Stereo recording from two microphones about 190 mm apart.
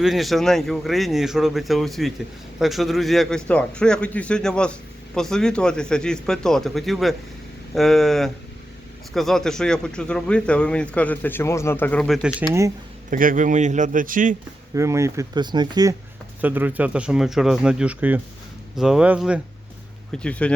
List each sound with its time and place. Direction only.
0.0 s a man's voice: centre (ahead or behind)
13.1 s a man's voice: 45° right (ahead or behind)
14.8 s speech: 15° right (ahead or behind)
16.4 s a man's voice: 10° right (ahead or behind)
20.1 s a man's voice: 5° left (ahead or behind)